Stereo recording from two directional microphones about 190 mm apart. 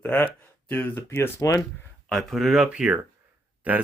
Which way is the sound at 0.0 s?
10° left (ahead or behind).